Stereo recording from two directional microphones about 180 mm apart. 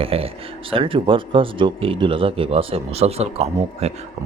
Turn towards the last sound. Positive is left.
turn(degrees=-35)  # may be behind; listen again after turning